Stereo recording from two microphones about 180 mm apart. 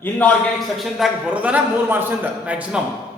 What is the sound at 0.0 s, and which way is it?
Speech, 10° left (ahead or behind).